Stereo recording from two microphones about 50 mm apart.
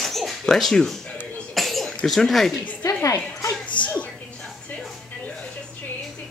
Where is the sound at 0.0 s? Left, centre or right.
Centre.